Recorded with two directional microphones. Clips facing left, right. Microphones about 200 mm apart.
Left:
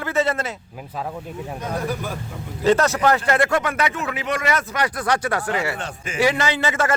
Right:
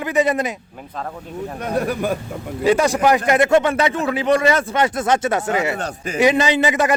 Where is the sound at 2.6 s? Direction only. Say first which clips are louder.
Right 2 dB; 10° right (ahead or behind).